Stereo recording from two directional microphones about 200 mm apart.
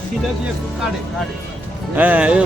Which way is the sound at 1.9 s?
5° right (ahead or behind).